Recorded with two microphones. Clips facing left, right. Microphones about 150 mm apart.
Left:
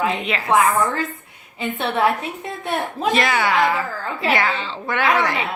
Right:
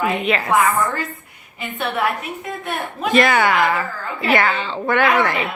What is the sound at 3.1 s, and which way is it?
A woman's voice, 55° right (ahead or behind).